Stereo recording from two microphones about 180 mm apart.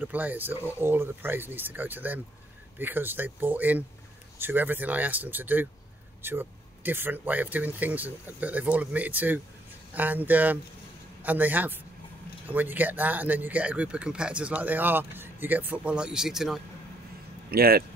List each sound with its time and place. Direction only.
0.0 s speech: 10° right (ahead or behind)
17.5 s speech: 55° right (ahead or behind)